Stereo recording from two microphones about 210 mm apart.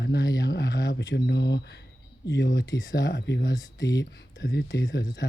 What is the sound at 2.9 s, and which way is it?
Speech, 55° left (ahead or behind).